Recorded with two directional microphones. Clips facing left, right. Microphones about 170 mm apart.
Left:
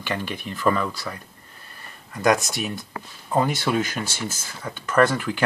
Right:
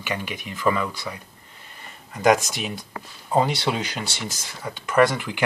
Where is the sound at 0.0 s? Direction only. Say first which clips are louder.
Left 1 dB; 15° right (ahead or behind).